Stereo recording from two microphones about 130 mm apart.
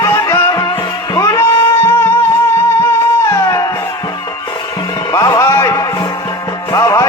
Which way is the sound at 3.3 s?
25° left (ahead or behind).